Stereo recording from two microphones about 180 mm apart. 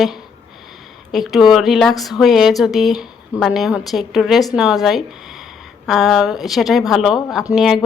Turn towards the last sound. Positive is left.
turn(degrees=-5)  # may be behind; listen again after turning